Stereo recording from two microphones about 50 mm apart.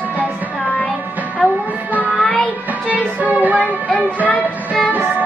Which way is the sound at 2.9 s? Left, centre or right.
Right.